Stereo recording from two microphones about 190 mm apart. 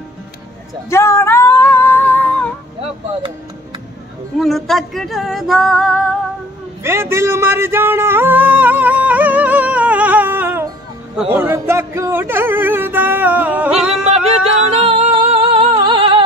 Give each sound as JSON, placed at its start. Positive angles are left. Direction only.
{"t": 0.8, "sound": "singing", "side_deg": 15}
{"t": 4.4, "sound": "music", "side_deg": 0}
{"t": 6.8, "sound": "a sound", "side_deg": -15}
{"t": 11.1, "sound": "speech", "side_deg": -10}
{"t": 14.8, "sound": "music", "side_deg": -30}